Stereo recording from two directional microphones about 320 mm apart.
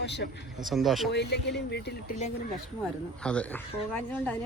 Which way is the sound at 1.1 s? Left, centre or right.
Left.